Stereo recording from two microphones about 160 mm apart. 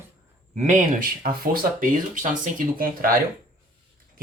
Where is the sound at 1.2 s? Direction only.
65° right (ahead or behind).